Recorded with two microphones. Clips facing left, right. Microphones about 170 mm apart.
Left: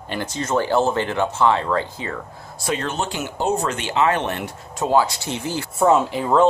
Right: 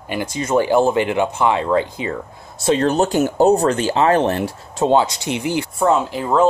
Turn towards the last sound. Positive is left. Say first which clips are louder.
# even
turn(degrees=0)  # may be behind; listen again after turning